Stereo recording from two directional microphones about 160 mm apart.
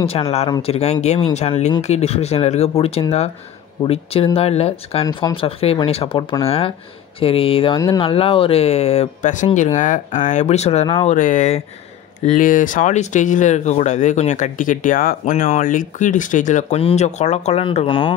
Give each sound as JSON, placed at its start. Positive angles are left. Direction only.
{"t": 0.6, "sound": "speech", "side_deg": 40}
{"t": 5.0, "sound": "speech", "side_deg": 30}
{"t": 11.1, "sound": "speech", "side_deg": 55}